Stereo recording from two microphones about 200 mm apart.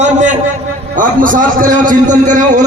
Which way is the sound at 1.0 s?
40° right (ahead or behind).